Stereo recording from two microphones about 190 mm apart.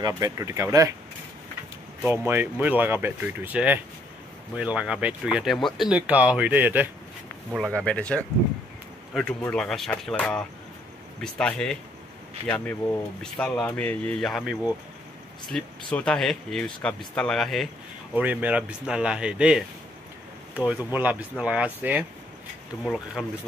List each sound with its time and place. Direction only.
0.0 s speech: 15° right (ahead or behind)
2.0 s speech: 10° right (ahead or behind)
7.5 s speech: 5° left (ahead or behind)
9.4 s speech: 5° left (ahead or behind)